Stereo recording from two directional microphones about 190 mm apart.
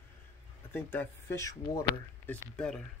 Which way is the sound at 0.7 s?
10° left (ahead or behind).